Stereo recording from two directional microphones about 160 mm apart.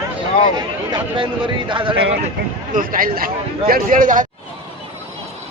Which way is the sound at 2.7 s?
60° right (ahead or behind).